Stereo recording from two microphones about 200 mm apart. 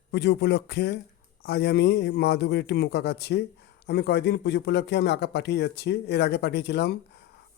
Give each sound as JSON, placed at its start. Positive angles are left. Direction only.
{"t": 0.1, "sound": "a man's voice", "side_deg": 60}